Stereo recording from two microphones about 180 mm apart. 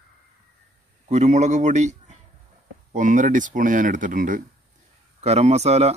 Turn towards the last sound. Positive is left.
turn(degrees=-35)  # may be behind; listen again after turning